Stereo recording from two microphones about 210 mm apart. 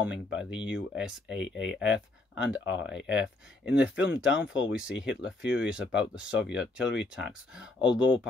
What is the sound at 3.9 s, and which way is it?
Speech, 55° left (ahead or behind).